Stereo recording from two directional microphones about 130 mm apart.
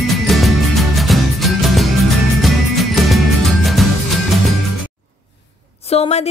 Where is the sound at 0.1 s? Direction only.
Centre (ahead or behind).